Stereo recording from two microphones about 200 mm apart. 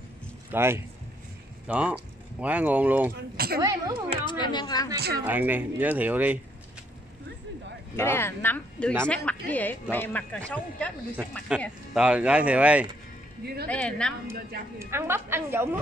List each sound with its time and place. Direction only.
0.5 s speech: 10° right (ahead or behind)
3.3 s speech: 50° right (ahead or behind)
3.6 s speech: 20° right (ahead or behind)
4.3 s speech: 20° left (ahead or behind)
4.9 s speech: 55° right (ahead or behind)
5.2 s speech: 10° right (ahead or behind)
7.9 s speech: 10° left (ahead or behind)
11.6 s speech: 5° right (ahead or behind)
13.7 s speech: 5° left (ahead or behind)
14.8 s speech: 10° right (ahead or behind)